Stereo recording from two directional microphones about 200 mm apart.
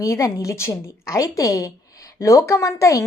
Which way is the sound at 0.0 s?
15° left (ahead or behind).